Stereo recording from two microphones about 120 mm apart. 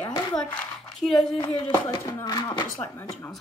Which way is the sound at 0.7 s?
5° left (ahead or behind).